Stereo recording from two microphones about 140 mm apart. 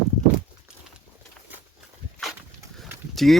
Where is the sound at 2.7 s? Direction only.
Centre (ahead or behind).